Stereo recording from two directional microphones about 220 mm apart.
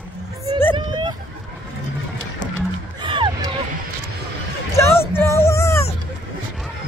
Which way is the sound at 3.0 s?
20° right (ahead or behind).